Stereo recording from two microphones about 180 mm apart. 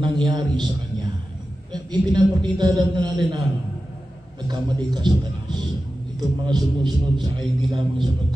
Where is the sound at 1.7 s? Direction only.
25° right (ahead or behind).